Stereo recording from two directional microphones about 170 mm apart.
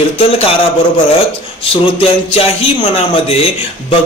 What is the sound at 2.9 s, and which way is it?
Speech, 35° left (ahead or behind).